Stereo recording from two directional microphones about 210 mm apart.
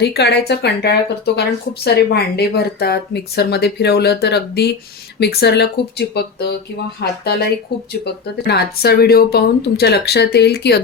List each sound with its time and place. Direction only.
0.0 s speech: 50° left (ahead or behind)